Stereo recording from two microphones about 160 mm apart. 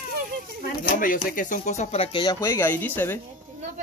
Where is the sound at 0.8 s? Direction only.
60° left (ahead or behind); by 2.4 s 30° left (ahead or behind).